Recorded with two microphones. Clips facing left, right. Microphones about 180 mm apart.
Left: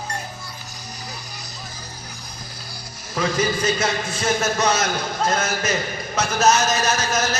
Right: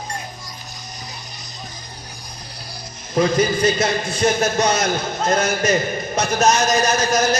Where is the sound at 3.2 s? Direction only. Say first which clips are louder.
Right 5 dB; 30° right (ahead or behind).